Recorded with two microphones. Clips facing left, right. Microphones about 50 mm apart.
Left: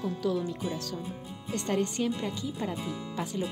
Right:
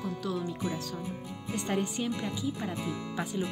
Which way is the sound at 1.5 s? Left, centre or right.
Centre.